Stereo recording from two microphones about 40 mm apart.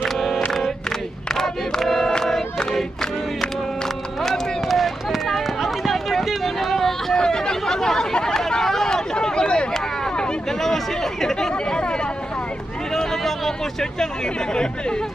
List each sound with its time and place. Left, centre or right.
1.3 s crowd: centre
2.2 s music: centre
4.2 s run: centre
7.2 s chatter: centre
10.6 s chatter: centre
14.5 s speech: centre